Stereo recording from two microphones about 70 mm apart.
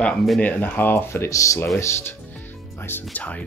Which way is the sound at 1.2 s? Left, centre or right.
Left.